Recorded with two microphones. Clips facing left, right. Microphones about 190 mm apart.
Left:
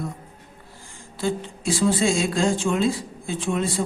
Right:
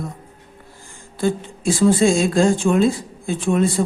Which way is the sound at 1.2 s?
50° right (ahead or behind).